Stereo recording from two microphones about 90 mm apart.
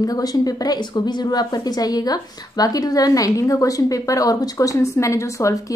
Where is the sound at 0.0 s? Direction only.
45° left (ahead or behind).